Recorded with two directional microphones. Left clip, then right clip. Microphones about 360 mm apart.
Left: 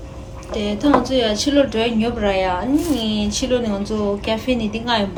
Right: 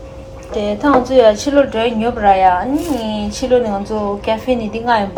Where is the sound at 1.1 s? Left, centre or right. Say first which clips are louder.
Right 7 dB; centre.